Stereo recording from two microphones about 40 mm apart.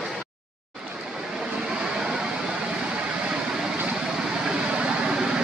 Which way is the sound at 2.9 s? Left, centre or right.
Right.